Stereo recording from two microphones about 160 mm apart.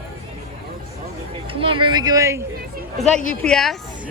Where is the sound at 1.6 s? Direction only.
30° right (ahead or behind).